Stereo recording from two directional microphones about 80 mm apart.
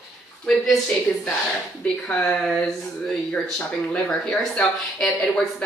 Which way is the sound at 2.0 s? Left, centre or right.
Centre.